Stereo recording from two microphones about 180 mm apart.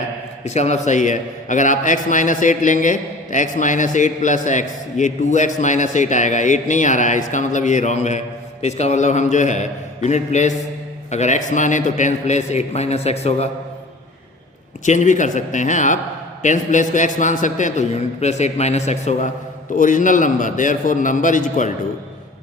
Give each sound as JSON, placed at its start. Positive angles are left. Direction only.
{"t": 0.4, "sound": "a man's voice", "side_deg": 40}
{"t": 14.8, "sound": "a man's voice", "side_deg": 45}